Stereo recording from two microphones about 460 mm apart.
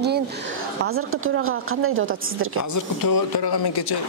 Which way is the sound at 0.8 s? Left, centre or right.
Right.